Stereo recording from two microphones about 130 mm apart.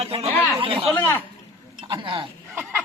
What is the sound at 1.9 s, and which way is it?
Speech, 40° right (ahead or behind).